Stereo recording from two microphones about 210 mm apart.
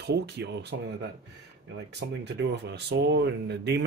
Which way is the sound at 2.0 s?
55° right (ahead or behind).